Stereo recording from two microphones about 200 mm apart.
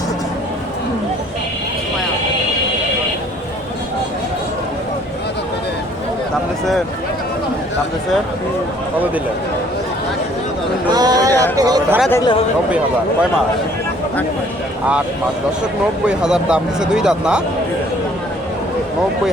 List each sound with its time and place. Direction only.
10.9 s speech: 20° right (ahead or behind)
12.1 s speech: 20° left (ahead or behind)
16.0 s speech: 5° right (ahead or behind)